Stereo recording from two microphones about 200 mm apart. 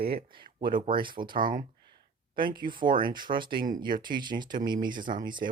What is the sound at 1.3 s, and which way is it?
Speech, 45° right (ahead or behind).